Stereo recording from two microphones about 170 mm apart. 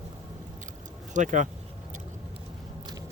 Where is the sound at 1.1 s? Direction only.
45° right (ahead or behind).